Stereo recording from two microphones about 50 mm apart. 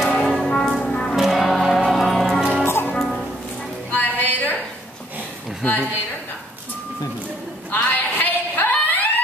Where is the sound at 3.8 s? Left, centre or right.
Left.